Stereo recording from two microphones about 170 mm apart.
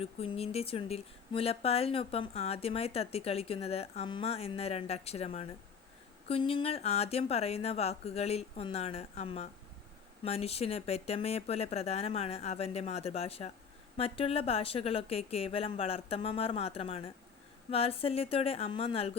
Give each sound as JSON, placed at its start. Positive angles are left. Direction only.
{"t": 0.0, "sound": "speech", "side_deg": 35}